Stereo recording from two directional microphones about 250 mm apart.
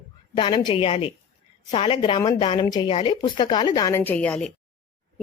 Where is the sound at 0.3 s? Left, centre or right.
Centre.